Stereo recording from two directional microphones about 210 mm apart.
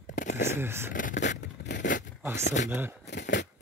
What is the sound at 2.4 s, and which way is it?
Speech, 35° left (ahead or behind).